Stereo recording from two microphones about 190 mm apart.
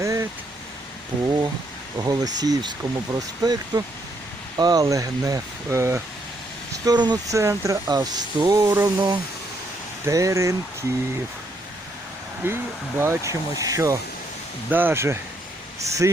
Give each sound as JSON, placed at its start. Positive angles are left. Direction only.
{"t": 0.0, "sound": "vehicle", "side_deg": -15}
{"t": 2.0, "sound": "speech", "side_deg": -20}
{"t": 12.4, "sound": "speech", "side_deg": -10}